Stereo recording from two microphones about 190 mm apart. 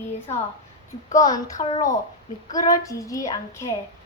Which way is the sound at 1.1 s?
20° left (ahead or behind).